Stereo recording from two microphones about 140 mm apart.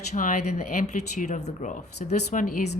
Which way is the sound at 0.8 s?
55° left (ahead or behind).